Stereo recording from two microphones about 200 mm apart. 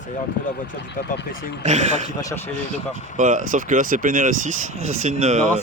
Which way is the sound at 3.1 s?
40° right (ahead or behind).